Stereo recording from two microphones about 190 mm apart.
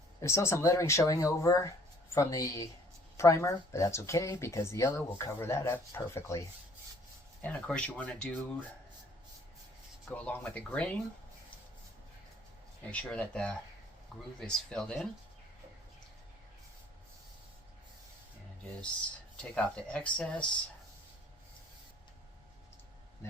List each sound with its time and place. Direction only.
0.2 s speech: 15° left (ahead or behind)
7.4 s speech: 10° left (ahead or behind)
10.2 s speech: 5° left (ahead or behind)
12.9 s speech: 5° left (ahead or behind)
19.4 s speech: 5° left (ahead or behind)